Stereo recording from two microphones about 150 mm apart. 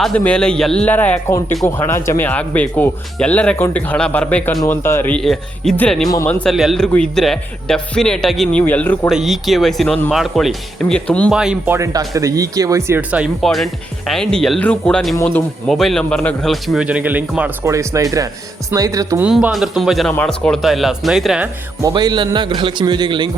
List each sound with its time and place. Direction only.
0.0 s a man's voice: 5° left (ahead or behind)
9.0 s a man's voice: centre (ahead or behind)
11.3 s a man's voice: 5° right (ahead or behind)
11.7 s a man's voice: 20° right (ahead or behind)
19.2 s a man's voice: 5° right (ahead or behind)
21.4 s speech: 20° right (ahead or behind)
21.9 s a man's voice: 30° right (ahead or behind)